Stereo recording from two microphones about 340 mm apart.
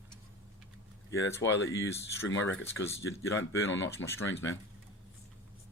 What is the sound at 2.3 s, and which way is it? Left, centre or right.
Speech, left.